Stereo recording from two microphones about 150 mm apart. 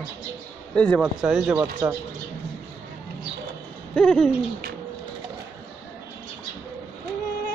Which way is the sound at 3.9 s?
5° left (ahead or behind).